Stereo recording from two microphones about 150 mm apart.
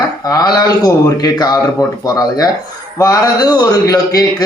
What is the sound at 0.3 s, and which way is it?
A man's voice, 25° left (ahead or behind).